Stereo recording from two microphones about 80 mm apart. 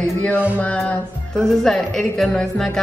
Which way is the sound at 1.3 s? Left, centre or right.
Centre.